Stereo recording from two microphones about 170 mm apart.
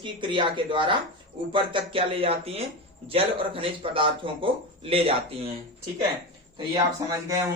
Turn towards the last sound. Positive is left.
turn(degrees=-20)  # may be behind; listen again after turning